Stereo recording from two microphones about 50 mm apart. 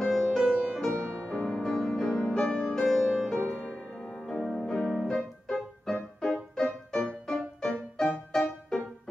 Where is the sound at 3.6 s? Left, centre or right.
Centre.